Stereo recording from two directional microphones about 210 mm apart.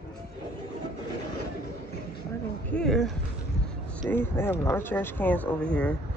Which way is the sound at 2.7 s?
5° left (ahead or behind).